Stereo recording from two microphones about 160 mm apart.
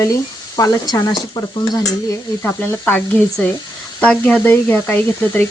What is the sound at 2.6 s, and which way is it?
Speech, 10° left (ahead or behind).